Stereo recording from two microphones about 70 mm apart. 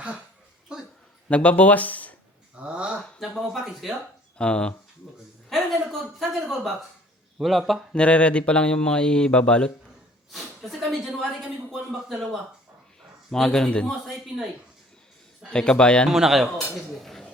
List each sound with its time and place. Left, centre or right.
1.3 s speech: centre
2.6 s a sound: centre
3.2 s speech: centre
4.4 s speech: centre
5.5 s a sound: centre
7.3 s speech: centre
7.9 s speech: centre
10.3 s a sound: centre
13.3 s speech: centre
14.1 s speech: centre
15.4 s speech: centre
16.0 s speech: centre